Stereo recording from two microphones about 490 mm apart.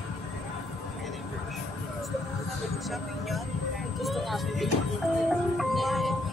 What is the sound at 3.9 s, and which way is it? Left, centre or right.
Speech, centre.